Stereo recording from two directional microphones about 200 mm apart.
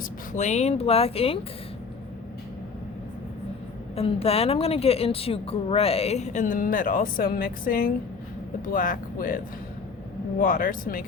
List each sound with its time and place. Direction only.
0.3 s a woman's voice: 35° left (ahead or behind)
3.9 s a woman's voice: 30° left (ahead or behind); by 9.4 s 45° left (ahead or behind)
10.4 s speech: 45° left (ahead or behind)